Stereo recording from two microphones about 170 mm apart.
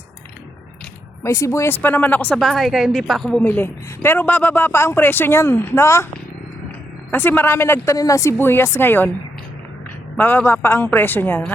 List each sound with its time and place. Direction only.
1.2 s speech: 15° left (ahead or behind)
7.1 s speech: 10° left (ahead or behind)
10.2 s speech: 10° left (ahead or behind)